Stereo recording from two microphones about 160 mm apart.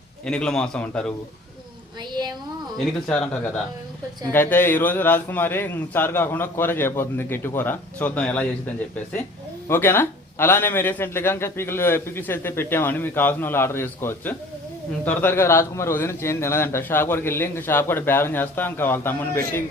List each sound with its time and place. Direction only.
0.3 s speech: 5° left (ahead or behind)
2.0 s a sound: 25° right (ahead or behind)
2.7 s speech: 5° left (ahead or behind)
9.6 s speech: 15° left (ahead or behind)